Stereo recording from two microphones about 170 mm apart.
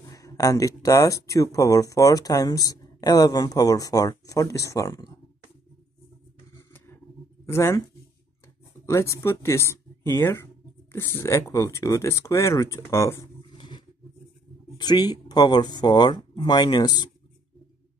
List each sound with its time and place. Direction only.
0.1 s speech: 20° left (ahead or behind)
6.5 s a sound: 15° left (ahead or behind)
7.4 s speech: 15° left (ahead or behind)
8.8 s speech: 15° left (ahead or behind)
13.6 s a sound: 25° left (ahead or behind)
14.8 s speech: 25° left (ahead or behind)